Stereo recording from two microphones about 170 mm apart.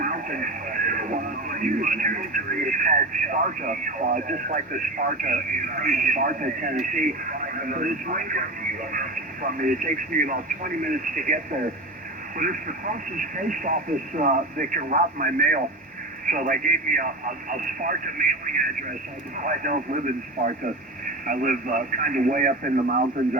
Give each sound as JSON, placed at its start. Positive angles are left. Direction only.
{"t": 0.0, "sound": "a man's voice", "side_deg": -50}
{"t": 12.4, "sound": "a man's voice", "side_deg": -50}
{"t": 21.2, "sound": "a man's voice", "side_deg": -50}